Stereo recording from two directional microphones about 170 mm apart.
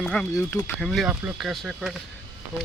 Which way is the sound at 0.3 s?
15° left (ahead or behind).